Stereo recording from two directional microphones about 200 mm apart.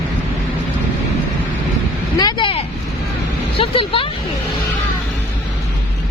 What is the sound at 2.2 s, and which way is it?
Speech, 20° left (ahead or behind).